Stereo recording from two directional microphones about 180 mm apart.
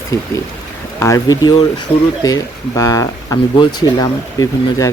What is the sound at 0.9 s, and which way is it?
Speech, 15° left (ahead or behind).